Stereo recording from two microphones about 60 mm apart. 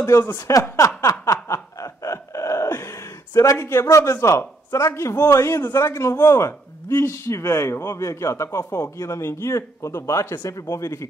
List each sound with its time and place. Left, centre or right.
0.5 s speech: left
1.2 s snicker: left
4.6 s a man's voice: left